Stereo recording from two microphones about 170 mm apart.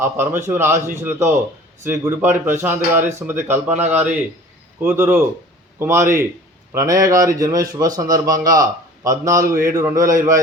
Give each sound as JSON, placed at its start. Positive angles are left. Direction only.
{"t": 0.0, "sound": "speech", "side_deg": -15}
{"t": 4.8, "sound": "a man's voice", "side_deg": -10}